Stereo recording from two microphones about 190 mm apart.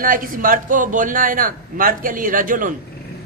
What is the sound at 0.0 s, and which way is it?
A woman's voice, 45° right (ahead or behind).